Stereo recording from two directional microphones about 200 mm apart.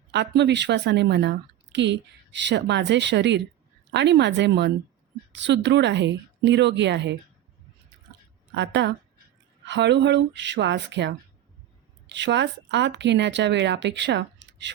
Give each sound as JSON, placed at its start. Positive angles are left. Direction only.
{"t": 0.1, "sound": "a woman's voice", "side_deg": -60}
{"t": 8.5, "sound": "a woman's voice", "side_deg": -60}